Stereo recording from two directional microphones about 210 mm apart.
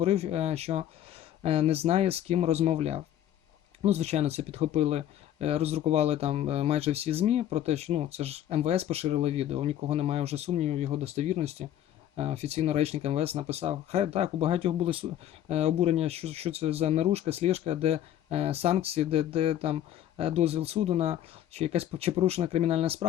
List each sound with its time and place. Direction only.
0.0 s speech: 30° right (ahead or behind)